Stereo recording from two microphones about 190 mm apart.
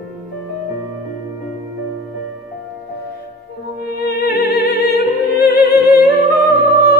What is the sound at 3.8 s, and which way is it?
Music, 55° left (ahead or behind).